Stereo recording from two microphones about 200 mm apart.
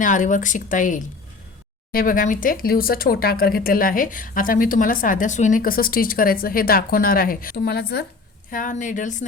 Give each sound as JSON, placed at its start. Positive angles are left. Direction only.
{"t": 0.0, "sound": "speech", "side_deg": 40}
{"t": 8.4, "sound": "speech", "side_deg": 40}